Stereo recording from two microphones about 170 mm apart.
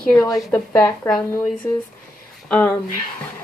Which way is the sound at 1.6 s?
15° left (ahead or behind).